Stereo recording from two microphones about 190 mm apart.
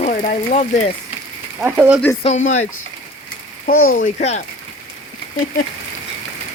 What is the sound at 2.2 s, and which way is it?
Speech, 40° left (ahead or behind).